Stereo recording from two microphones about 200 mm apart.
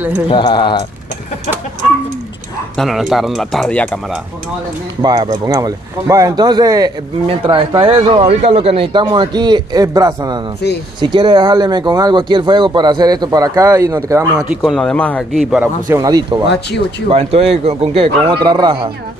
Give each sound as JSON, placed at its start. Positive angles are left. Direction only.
{"t": 0.3, "sound": "speech", "side_deg": 25}
{"t": 2.8, "sound": "speech", "side_deg": 0}
{"t": 5.0, "sound": "a man's voice", "side_deg": -20}
{"t": 14.5, "sound": "speech", "side_deg": 0}
{"t": 17.1, "sound": "speech", "side_deg": -30}